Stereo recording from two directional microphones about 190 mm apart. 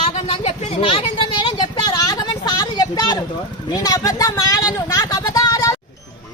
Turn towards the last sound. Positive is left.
turn(degrees=20)  # may be behind; listen again after turning